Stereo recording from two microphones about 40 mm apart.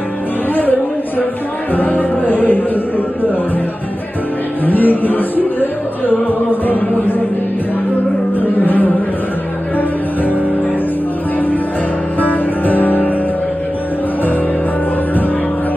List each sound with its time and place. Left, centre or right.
1.7 s music: left
4.6 s music: left
8.4 s music: left
12.2 s music: left